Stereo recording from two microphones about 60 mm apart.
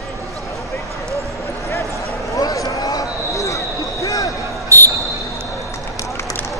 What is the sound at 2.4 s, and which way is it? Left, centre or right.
Basketball bounce, left.